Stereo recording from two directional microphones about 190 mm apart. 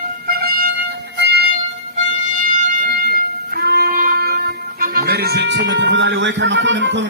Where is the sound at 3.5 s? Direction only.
55° right (ahead or behind).